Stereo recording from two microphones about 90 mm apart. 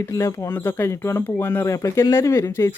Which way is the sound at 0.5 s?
25° left (ahead or behind).